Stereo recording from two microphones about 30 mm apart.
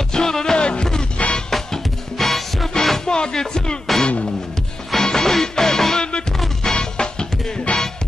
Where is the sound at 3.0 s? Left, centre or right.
Left.